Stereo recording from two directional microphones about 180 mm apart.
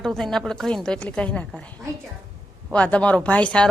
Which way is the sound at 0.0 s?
Centre (ahead or behind).